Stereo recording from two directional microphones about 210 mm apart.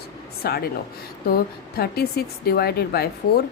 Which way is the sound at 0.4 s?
50° left (ahead or behind).